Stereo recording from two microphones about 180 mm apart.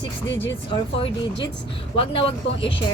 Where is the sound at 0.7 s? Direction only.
30° left (ahead or behind).